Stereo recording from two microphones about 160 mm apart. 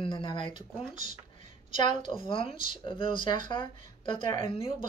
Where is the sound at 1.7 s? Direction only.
30° left (ahead or behind).